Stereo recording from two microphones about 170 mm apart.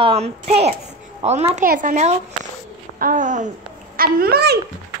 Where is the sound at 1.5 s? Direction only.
50° right (ahead or behind).